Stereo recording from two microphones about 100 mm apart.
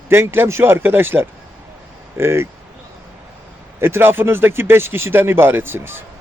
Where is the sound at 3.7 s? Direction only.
25° right (ahead or behind).